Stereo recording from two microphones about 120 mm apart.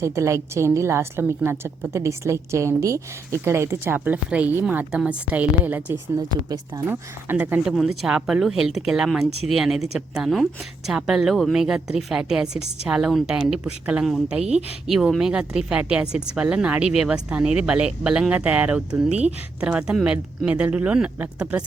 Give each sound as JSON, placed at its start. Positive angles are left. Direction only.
{"t": 0.0, "sound": "a woman's voice", "side_deg": -25}
{"t": 6.1, "sound": "speech", "side_deg": -30}
{"t": 6.8, "sound": "speech", "side_deg": -15}
{"t": 7.7, "sound": "a woman's voice", "side_deg": -5}